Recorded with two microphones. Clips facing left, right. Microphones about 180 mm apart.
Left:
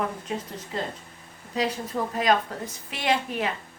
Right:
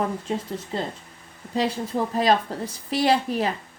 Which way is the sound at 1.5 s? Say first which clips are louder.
Right 3 dB; 30° right (ahead or behind).